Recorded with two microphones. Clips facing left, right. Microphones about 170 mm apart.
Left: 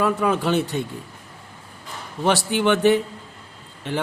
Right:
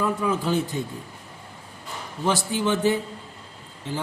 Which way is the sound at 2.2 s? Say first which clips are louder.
Left 4 dB; 70° left (ahead or behind).